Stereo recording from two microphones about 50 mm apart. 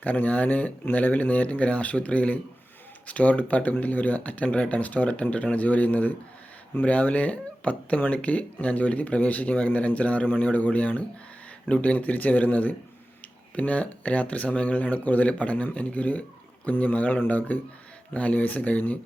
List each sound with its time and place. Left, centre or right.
0.0 s speech: left